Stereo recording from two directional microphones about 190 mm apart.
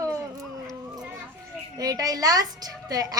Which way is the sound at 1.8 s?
20° right (ahead or behind).